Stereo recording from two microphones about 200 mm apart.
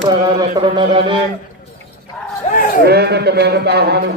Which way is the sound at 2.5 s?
40° left (ahead or behind).